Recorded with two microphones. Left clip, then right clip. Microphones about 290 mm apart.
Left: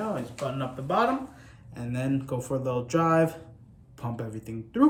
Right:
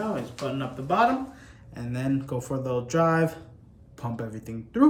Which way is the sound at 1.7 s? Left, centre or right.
Centre.